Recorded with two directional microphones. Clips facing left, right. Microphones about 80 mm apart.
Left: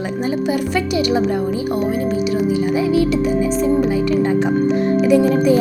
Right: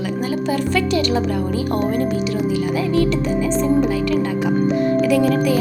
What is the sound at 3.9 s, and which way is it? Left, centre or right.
A woman's voice, left.